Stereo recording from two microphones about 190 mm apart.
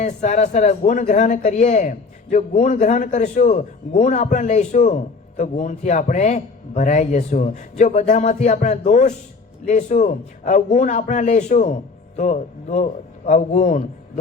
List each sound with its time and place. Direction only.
0.0 s a man's voice: 40° left (ahead or behind)